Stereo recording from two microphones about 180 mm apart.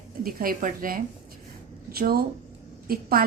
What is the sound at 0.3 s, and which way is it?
A woman's voice, 50° right (ahead or behind).